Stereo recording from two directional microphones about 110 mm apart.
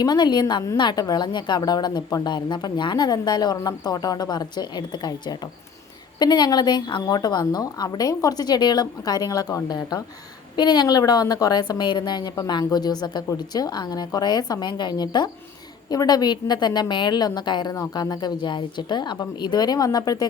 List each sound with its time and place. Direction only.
0.0 s a woman's voice: 40° left (ahead or behind)